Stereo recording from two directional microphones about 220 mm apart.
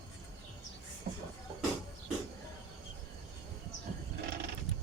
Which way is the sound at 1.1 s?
40° right (ahead or behind).